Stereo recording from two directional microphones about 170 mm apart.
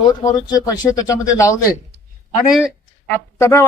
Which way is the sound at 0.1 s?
25° left (ahead or behind).